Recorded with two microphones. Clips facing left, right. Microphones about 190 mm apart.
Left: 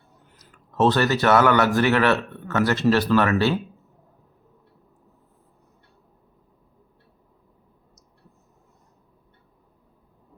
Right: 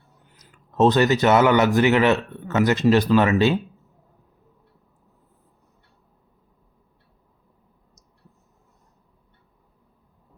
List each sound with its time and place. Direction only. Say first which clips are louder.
0.3 s speech: right 2 dB; 20° right (ahead or behind)